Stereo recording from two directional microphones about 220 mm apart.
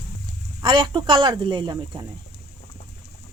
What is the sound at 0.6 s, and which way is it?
Speech, 20° right (ahead or behind).